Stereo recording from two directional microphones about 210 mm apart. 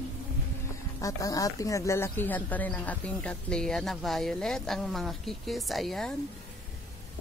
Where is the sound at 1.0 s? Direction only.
15° left (ahead or behind).